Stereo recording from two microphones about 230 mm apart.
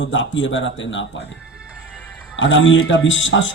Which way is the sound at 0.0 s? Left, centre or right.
Left.